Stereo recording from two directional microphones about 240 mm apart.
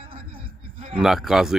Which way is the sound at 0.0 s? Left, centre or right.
Right.